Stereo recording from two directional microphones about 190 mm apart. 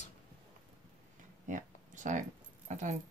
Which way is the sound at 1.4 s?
40° right (ahead or behind).